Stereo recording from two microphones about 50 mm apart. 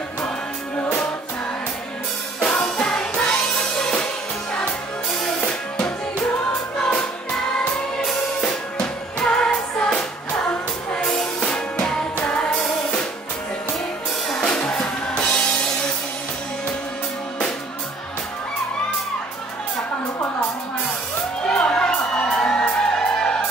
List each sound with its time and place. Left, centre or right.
2.4 s music: centre
5.5 s drum: left
8.0 s music: centre; by 12.4 s left
14.2 s music: centre
21.5 s music: centre